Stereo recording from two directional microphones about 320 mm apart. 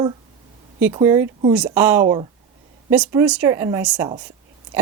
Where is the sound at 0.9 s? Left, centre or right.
Centre.